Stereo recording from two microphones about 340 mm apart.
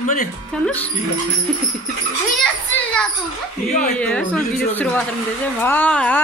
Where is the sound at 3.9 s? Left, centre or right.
Centre.